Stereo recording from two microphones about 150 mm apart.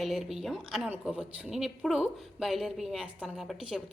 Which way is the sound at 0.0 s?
Centre (ahead or behind).